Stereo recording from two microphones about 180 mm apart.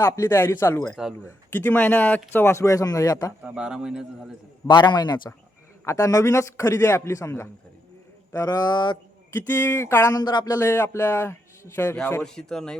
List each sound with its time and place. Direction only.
0.0 s music: 15° left (ahead or behind)
0.9 s a man's voice: 5° right (ahead or behind)
1.5 s music: 10° left (ahead or behind)
2.3 s speech: 15° left (ahead or behind)
3.4 s a man's voice: 5° right (ahead or behind)
4.6 s speech: 25° left (ahead or behind)
5.8 s music: 15° left (ahead or behind)
8.3 s speech: 20° left (ahead or behind)
9.5 s music: 10° left (ahead or behind)
11.9 s a man's voice: 5° left (ahead or behind)